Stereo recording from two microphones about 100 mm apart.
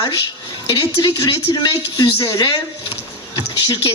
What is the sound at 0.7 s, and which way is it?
A man's voice, 45° left (ahead or behind).